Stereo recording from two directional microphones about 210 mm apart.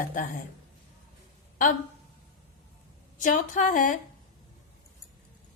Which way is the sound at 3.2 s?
40° left (ahead or behind).